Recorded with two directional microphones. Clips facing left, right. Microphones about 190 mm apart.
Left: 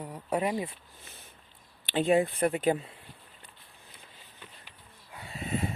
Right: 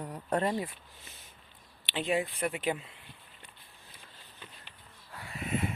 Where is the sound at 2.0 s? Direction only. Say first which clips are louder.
Left 6 dB; 45° left (ahead or behind).